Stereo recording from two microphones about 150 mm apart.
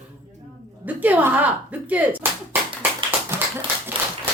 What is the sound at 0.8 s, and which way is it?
A woman's voice, 10° right (ahead or behind).